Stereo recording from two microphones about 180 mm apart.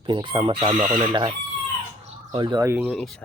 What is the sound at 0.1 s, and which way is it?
Speech, 30° right (ahead or behind).